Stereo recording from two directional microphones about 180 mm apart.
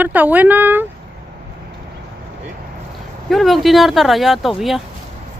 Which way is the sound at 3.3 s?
Centre (ahead or behind).